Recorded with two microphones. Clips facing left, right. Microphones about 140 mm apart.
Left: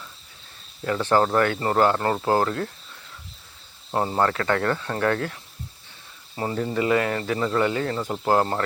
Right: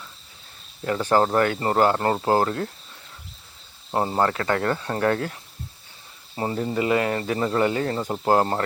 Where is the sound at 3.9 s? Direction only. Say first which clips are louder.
Even; 20° right (ahead or behind).